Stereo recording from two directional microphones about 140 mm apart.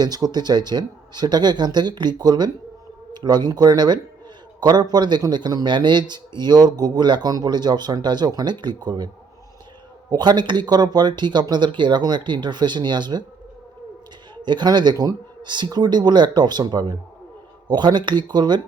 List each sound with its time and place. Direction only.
0.0 s speech: 30° right (ahead or behind)
10.1 s speech: 30° right (ahead or behind)
14.4 s speech: 30° right (ahead or behind)